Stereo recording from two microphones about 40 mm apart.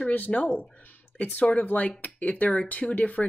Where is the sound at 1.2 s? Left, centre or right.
Left.